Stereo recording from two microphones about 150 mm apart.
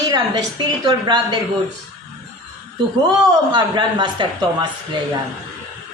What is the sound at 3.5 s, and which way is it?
Speech, 30° right (ahead or behind).